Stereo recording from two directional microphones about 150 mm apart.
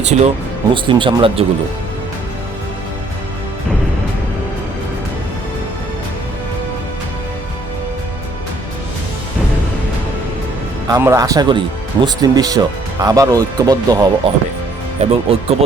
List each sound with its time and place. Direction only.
0.0 s speech: 50° right (ahead or behind)
0.7 s speech: 35° right (ahead or behind)
10.8 s speech: 20° right (ahead or behind)
15.0 s speech: 40° right (ahead or behind)